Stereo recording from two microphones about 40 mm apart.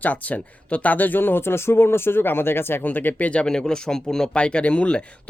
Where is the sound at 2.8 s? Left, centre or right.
Left.